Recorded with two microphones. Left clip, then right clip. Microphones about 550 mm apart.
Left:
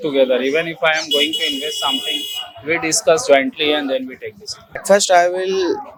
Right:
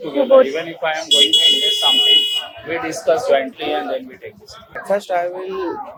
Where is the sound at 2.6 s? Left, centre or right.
Left.